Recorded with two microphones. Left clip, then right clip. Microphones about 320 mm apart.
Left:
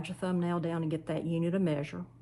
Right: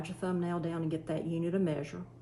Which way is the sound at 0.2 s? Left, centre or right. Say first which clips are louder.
Left 2 dB; centre.